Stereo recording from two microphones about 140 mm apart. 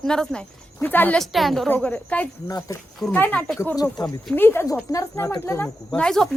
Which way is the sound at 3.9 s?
30° left (ahead or behind).